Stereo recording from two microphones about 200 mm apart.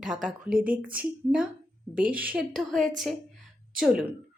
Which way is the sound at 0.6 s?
45° right (ahead or behind).